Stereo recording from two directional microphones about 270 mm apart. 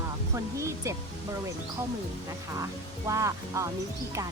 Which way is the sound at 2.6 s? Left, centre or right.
Centre.